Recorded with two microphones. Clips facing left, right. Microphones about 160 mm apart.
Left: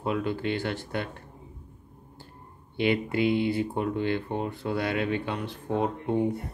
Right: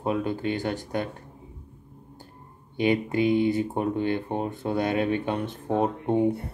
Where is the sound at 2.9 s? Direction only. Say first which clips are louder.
Right 3 dB; 15° right (ahead or behind).